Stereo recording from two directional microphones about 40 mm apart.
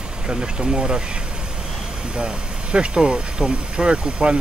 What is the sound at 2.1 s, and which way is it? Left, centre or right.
Speech, right.